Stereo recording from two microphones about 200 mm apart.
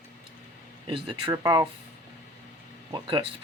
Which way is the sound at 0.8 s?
25° right (ahead or behind).